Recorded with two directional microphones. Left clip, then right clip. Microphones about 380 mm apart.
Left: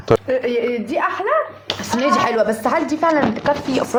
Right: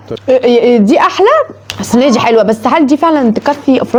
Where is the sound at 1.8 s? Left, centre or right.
Right.